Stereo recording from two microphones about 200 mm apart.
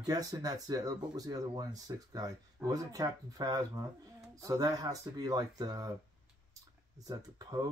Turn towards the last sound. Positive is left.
turn(degrees=-20)  # may be behind; listen again after turning